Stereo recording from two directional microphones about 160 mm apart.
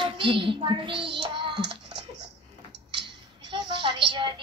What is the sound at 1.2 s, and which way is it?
Child singing, 30° right (ahead or behind).